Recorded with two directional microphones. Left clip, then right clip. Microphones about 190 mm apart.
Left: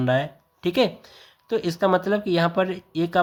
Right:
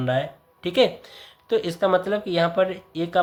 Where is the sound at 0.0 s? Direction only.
30° left (ahead or behind).